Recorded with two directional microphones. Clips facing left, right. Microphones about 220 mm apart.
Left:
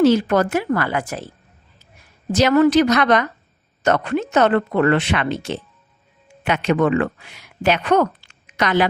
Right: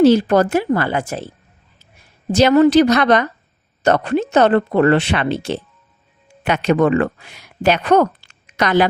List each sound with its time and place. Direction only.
0.0 s speech: 30° right (ahead or behind)
2.3 s speech: 25° right (ahead or behind); by 8.9 s 40° right (ahead or behind)